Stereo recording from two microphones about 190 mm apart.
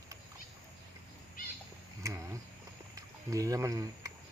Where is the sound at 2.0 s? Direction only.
15° right (ahead or behind).